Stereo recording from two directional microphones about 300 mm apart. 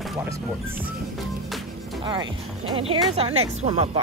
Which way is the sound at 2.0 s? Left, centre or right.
Centre.